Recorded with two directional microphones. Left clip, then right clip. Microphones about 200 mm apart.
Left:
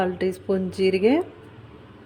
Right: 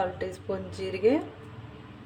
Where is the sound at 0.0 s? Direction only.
45° left (ahead or behind).